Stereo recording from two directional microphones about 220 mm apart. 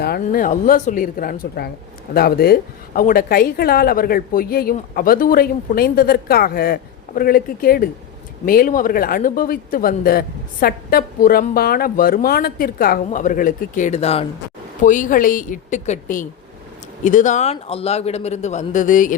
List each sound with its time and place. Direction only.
0.0 s a woman's voice: 45° left (ahead or behind)